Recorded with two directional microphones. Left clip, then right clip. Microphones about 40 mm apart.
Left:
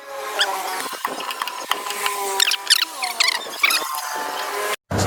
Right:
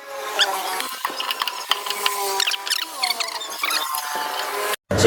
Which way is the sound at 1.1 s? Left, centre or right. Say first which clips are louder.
Right 2 dB; centre.